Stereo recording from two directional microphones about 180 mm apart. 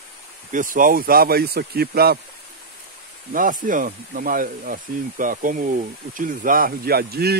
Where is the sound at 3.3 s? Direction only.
50° right (ahead or behind).